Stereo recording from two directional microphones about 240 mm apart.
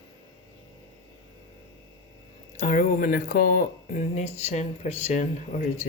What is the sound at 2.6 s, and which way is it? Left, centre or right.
Speech, left.